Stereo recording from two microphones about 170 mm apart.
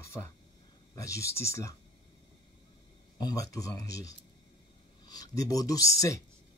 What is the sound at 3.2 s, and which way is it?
Speech, 20° left (ahead or behind).